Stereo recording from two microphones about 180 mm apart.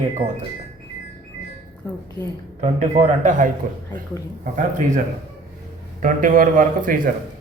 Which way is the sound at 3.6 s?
45° right (ahead or behind).